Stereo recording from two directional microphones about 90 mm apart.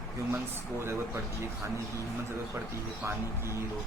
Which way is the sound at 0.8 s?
30° right (ahead or behind).